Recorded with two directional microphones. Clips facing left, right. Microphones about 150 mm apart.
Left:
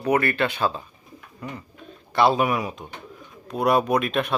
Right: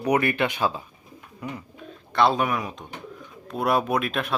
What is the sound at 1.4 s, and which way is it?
Bird, 10° right (ahead or behind).